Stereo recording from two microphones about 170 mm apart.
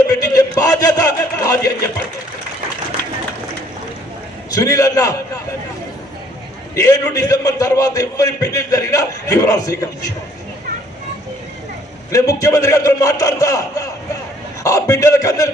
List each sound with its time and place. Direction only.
0.1 s a sound: 20° left (ahead or behind)
4.5 s a man's voice: 20° left (ahead or behind)
6.7 s a man's voice: 20° left (ahead or behind)
12.1 s a man's voice: 20° left (ahead or behind)